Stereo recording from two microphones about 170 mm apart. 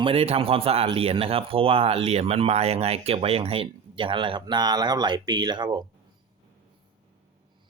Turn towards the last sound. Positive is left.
turn(degrees=-25)  # may be behind; listen again after turning